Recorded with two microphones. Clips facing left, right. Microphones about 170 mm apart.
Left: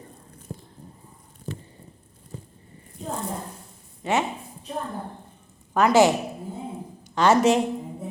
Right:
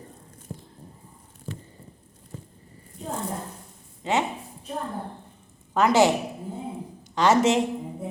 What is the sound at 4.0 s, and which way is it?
Dog, 20° right (ahead or behind).